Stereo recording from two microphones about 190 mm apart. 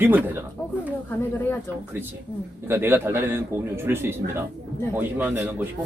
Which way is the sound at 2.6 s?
10° right (ahead or behind).